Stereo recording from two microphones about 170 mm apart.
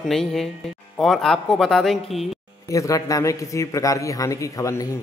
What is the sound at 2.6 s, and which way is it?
A man's voice, 20° left (ahead or behind).